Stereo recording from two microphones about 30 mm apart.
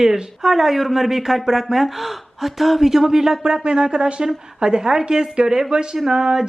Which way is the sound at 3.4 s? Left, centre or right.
Right.